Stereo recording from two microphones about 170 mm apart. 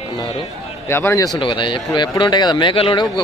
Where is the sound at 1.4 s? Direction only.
30° left (ahead or behind).